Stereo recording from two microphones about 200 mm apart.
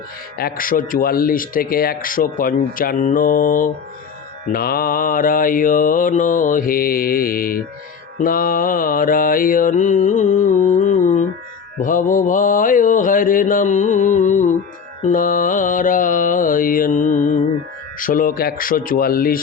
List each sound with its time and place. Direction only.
0.3 s speech: 45° left (ahead or behind)
8.2 s mantra: 45° left (ahead or behind)
18.0 s speech: 45° left (ahead or behind)